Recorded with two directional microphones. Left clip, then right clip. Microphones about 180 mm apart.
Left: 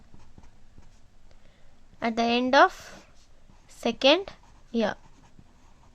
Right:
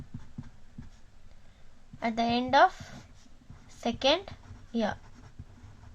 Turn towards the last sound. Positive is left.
turn(degrees=45)  # may be behind; listen again after turning